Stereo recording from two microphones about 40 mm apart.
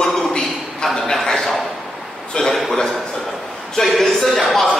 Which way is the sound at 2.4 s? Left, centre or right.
Left.